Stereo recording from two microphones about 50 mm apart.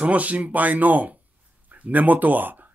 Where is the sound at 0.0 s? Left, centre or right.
Right.